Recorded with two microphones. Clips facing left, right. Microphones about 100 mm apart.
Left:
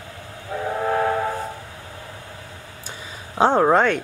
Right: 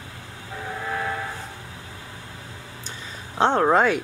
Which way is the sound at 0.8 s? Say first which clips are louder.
Left 8 dB; 45° left (ahead or behind).